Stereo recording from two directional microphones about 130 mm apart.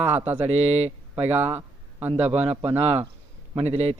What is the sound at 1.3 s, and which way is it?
Speech, 15° right (ahead or behind).